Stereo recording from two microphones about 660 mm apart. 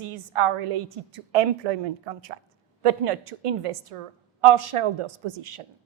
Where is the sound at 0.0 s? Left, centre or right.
Right.